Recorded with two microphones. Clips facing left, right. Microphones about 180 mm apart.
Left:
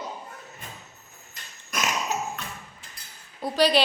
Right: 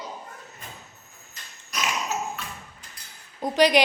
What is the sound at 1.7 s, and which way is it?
Dog, 50° left (ahead or behind).